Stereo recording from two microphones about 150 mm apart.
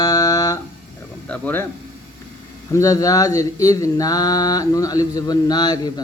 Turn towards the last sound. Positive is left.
turn(degrees=30)  # may be behind; listen again after turning